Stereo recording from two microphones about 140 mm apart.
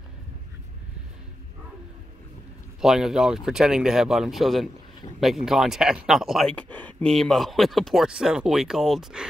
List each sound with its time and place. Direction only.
2.8 s speech: 5° right (ahead or behind)
6.5 s speech: 10° left (ahead or behind)